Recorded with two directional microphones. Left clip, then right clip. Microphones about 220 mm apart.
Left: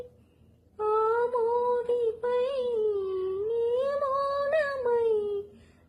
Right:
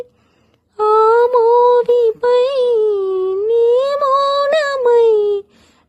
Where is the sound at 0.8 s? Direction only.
50° right (ahead or behind).